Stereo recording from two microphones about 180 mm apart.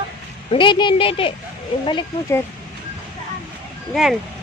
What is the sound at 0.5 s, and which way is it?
Speech, 25° left (ahead or behind).